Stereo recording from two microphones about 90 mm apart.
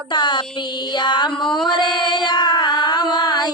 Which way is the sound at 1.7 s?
60° left (ahead or behind).